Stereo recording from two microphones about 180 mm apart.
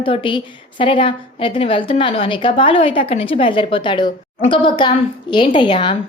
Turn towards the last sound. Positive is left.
turn(degrees=25)  # may be behind; listen again after turning